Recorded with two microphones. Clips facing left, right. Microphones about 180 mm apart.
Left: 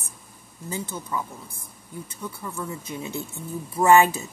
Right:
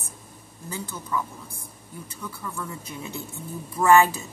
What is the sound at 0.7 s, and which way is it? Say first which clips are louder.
Speech: left 2 dB; 20° left (ahead or behind).